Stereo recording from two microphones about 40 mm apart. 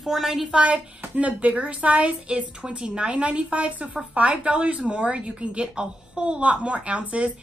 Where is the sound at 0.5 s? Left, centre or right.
Right.